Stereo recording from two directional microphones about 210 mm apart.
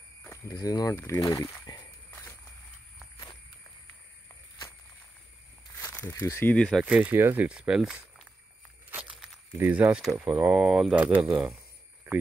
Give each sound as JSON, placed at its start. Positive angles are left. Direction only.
{"t": 0.2, "sound": "speech", "side_deg": 15}
{"t": 5.8, "sound": "speech", "side_deg": 10}
{"t": 6.8, "sound": "speech", "side_deg": -5}
{"t": 8.9, "sound": "tearing", "side_deg": -5}
{"t": 10.4, "sound": "speech", "side_deg": -5}
{"t": 12.1, "sound": "a sound", "side_deg": -10}